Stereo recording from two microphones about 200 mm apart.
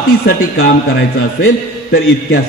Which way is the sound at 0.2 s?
50° left (ahead or behind).